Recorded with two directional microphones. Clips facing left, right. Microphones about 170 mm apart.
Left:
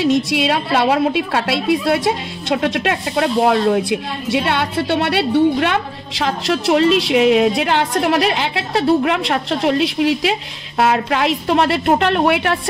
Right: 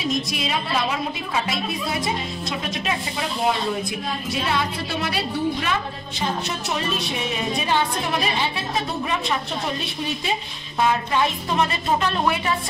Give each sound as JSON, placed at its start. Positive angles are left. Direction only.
{"t": 0.0, "sound": "a woman's voice", "side_deg": 80}